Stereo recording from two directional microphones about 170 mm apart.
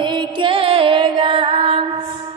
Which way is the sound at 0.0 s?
25° right (ahead or behind).